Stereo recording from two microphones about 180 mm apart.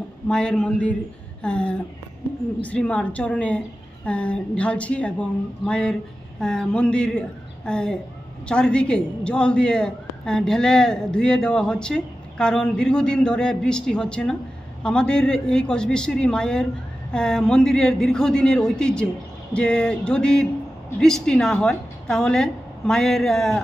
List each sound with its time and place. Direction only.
0.3 s a man's voice: 5° left (ahead or behind)